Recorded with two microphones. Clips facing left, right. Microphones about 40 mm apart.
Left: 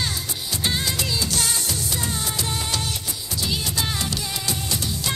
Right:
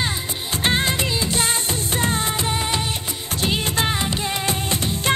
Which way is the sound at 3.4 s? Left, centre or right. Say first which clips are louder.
Right 5 dB; right.